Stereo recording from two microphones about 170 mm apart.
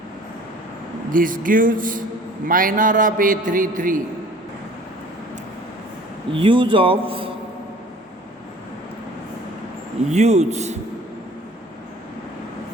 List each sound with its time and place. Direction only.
1.1 s a man's voice: 55° right (ahead or behind)
6.3 s speech: 30° right (ahead or behind)
10.1 s speech: 40° right (ahead or behind)